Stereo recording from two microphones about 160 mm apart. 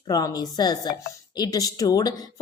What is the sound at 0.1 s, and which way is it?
A woman's voice, 25° left (ahead or behind).